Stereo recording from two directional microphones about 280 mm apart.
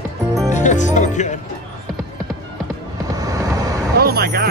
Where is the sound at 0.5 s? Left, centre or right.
Left.